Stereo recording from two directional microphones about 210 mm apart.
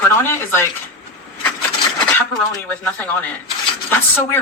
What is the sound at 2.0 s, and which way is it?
Speech, 10° left (ahead or behind).